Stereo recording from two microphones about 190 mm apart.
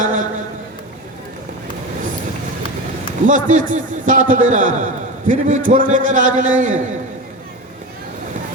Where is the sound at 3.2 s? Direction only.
40° right (ahead or behind).